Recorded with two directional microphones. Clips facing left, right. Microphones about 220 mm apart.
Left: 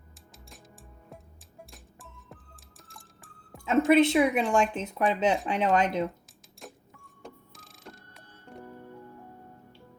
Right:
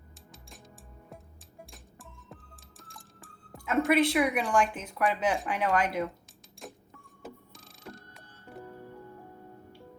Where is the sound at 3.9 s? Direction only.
25° left (ahead or behind).